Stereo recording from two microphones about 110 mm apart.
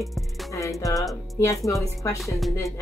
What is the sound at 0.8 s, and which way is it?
Music, 30° left (ahead or behind).